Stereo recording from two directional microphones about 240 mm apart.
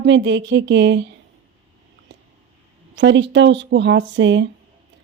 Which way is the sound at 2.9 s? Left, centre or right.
Right.